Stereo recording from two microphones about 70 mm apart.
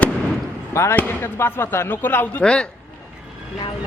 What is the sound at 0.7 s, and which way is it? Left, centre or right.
Basketball bounce, left.